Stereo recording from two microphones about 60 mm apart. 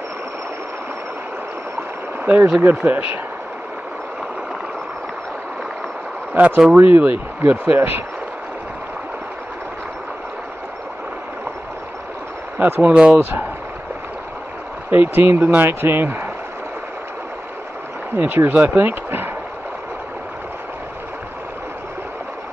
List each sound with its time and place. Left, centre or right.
2.2 s speech: right
6.3 s speech: right
12.5 s speech: right
12.9 s speech: centre
14.9 s speech: right
18.1 s speech: right